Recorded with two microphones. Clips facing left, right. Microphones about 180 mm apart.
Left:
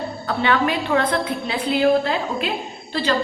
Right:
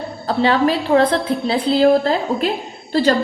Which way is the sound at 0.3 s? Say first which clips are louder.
Right 5 dB; 30° right (ahead or behind).